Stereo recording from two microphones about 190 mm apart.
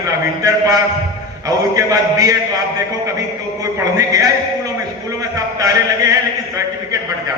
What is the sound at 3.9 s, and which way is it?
Speech, 20° right (ahead or behind).